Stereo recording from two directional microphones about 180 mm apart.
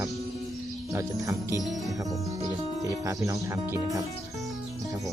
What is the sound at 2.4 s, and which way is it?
Speech, 20° right (ahead or behind).